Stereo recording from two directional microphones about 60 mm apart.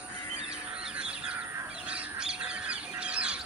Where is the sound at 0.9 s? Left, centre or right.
Centre.